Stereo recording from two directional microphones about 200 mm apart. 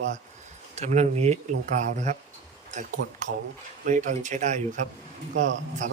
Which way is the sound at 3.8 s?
40° right (ahead or behind).